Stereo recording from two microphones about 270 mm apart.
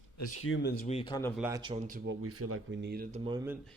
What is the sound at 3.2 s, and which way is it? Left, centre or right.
Speech, centre.